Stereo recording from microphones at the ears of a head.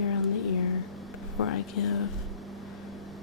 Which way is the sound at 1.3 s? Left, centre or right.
Left.